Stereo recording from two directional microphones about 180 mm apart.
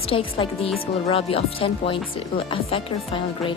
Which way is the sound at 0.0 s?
30° left (ahead or behind).